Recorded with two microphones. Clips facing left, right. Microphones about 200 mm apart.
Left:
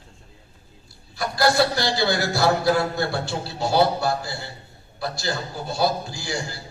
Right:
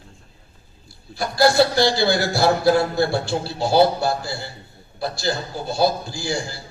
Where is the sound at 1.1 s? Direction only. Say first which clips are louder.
Right 4 dB; 30° right (ahead or behind).